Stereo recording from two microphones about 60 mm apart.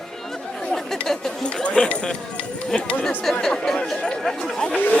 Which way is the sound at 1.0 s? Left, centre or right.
Centre.